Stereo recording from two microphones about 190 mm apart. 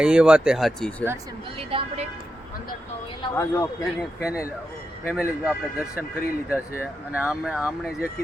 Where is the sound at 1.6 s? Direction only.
30° right (ahead or behind).